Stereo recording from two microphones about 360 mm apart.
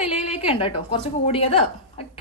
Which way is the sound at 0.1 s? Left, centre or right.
Centre.